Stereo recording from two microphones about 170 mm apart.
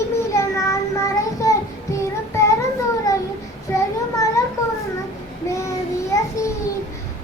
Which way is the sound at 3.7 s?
15° left (ahead or behind).